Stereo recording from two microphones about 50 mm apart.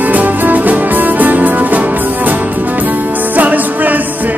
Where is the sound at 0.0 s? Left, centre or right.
Right.